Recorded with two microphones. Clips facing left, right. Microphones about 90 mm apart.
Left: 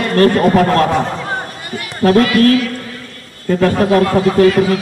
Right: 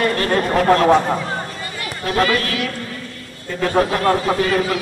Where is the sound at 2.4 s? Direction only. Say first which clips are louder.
Left 12 dB; 40° left (ahead or behind).